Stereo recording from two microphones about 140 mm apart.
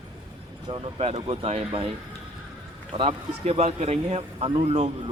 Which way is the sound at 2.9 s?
45° right (ahead or behind).